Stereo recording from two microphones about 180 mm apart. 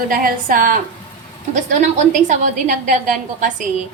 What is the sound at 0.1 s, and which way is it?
A woman's voice, 50° right (ahead or behind).